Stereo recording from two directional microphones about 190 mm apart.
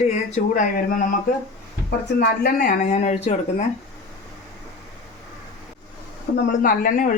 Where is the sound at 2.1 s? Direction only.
55° left (ahead or behind); by 3.3 s 35° left (ahead or behind).